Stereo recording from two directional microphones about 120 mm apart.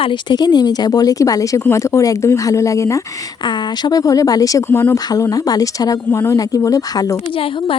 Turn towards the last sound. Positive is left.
turn(degrees=50)  # may be behind; listen again after turning